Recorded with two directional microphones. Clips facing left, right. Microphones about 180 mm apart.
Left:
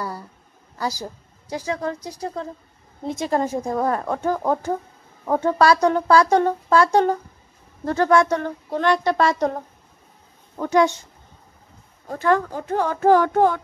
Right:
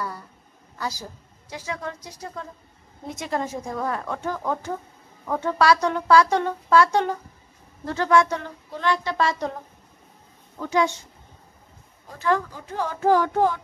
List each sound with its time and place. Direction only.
0.7 s a woman's voice: 35° left (ahead or behind)
7.8 s speech: 50° left (ahead or behind)
10.6 s speech: 65° left (ahead or behind)
12.1 s speech: 55° left (ahead or behind)